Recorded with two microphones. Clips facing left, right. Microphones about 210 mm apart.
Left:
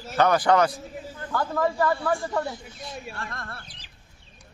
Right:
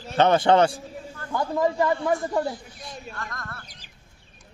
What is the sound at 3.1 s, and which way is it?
Speech, 30° left (ahead or behind).